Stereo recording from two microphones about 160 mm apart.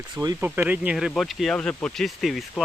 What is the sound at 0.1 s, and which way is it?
Speech, 25° right (ahead or behind).